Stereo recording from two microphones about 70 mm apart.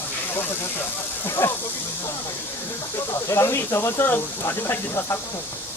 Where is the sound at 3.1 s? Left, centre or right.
Left.